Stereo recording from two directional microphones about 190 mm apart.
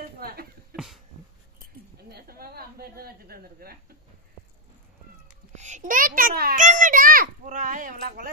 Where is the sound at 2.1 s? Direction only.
55° right (ahead or behind).